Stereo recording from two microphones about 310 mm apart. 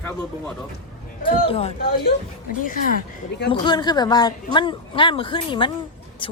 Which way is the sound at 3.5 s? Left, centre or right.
Centre.